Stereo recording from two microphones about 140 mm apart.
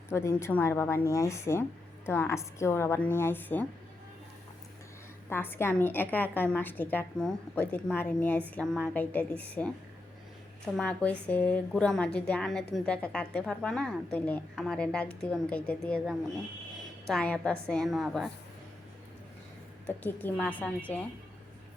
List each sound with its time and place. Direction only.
0.1 s a woman's voice: 20° left (ahead or behind)
5.3 s a woman's voice: 15° left (ahead or behind)
10.8 s a woman's voice: 10° left (ahead or behind)
17.1 s a woman's voice: 10° left (ahead or behind)
19.9 s a woman's voice: 15° left (ahead or behind)